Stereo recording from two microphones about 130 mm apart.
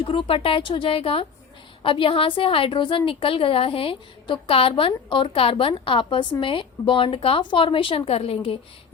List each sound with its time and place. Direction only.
0.0 s a woman's voice: 45° left (ahead or behind)